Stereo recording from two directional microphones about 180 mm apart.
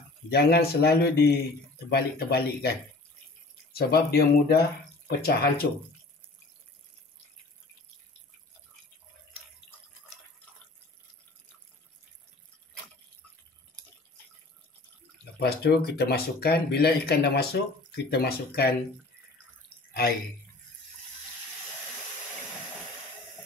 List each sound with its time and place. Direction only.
0.3 s speech: 60° left (ahead or behind)
3.7 s speech: 60° left (ahead or behind)
15.3 s speech: 60° left (ahead or behind)